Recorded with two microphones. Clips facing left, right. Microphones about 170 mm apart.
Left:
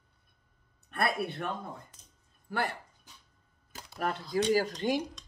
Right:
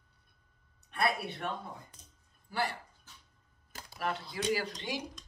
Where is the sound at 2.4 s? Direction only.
50° left (ahead or behind).